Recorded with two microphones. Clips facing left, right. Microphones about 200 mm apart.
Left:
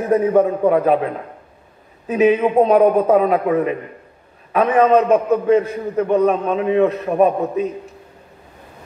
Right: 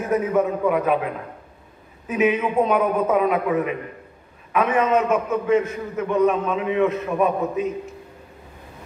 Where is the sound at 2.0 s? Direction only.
35° left (ahead or behind).